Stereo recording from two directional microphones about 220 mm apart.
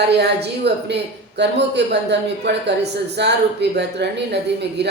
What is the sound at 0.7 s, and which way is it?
A man's voice, 50° right (ahead or behind).